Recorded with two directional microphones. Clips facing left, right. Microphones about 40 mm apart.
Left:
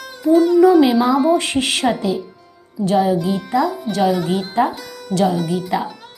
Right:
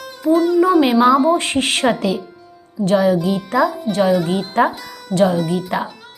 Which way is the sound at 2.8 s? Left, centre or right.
Right.